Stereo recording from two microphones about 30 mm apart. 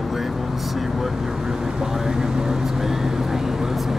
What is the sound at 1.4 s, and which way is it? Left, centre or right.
Speech, centre.